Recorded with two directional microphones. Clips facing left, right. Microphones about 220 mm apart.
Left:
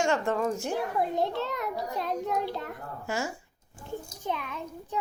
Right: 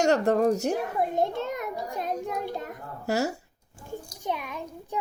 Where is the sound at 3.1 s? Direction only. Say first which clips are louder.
Right 6 dB; 40° right (ahead or behind).